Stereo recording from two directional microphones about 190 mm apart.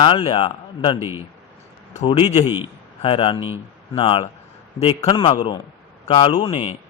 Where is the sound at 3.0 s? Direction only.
30° left (ahead or behind).